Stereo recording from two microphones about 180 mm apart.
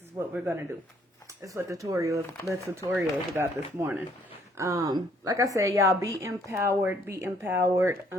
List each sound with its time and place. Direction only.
0.3 s speech: 10° right (ahead or behind)